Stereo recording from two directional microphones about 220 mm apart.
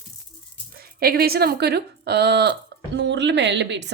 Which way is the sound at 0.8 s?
45° right (ahead or behind).